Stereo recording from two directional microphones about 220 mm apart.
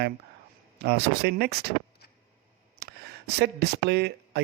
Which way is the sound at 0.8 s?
45° right (ahead or behind).